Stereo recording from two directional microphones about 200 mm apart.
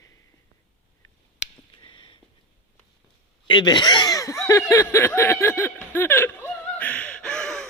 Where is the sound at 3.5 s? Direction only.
20° left (ahead or behind).